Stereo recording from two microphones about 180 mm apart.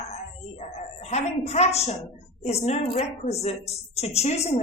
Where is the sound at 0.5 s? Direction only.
40° left (ahead or behind).